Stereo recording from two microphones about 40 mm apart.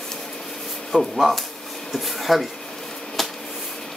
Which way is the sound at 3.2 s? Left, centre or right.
Centre.